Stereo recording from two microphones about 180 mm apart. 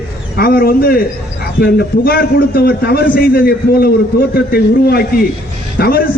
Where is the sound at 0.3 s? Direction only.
55° left (ahead or behind).